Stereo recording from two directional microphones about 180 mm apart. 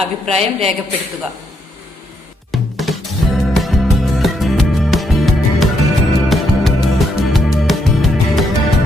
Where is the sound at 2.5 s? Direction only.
Centre (ahead or behind).